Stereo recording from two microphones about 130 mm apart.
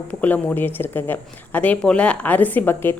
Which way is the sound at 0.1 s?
10° left (ahead or behind).